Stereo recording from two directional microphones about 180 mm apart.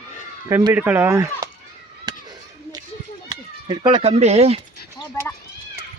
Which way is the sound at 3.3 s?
25° right (ahead or behind).